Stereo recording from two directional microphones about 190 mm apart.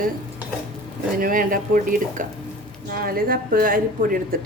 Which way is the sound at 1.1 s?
45° right (ahead or behind).